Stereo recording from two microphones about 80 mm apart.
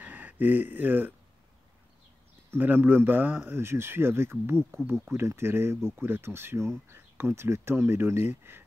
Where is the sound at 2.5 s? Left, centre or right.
Right.